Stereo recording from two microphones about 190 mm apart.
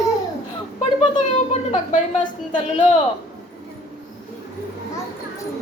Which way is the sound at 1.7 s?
40° left (ahead or behind).